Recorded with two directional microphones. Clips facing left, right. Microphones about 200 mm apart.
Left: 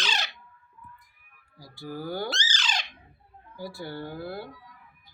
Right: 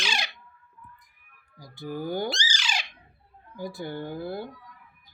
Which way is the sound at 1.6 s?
20° right (ahead or behind).